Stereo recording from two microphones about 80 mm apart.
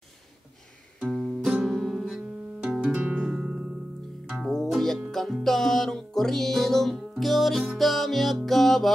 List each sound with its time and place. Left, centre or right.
0.9 s music: centre
2.9 s music: right
3.2 s music: centre
4.4 s music: centre